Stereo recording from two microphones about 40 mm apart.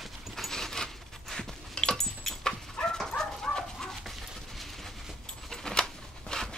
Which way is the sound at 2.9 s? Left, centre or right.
Centre.